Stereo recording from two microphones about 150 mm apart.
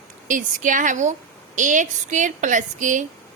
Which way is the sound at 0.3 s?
60° right (ahead or behind).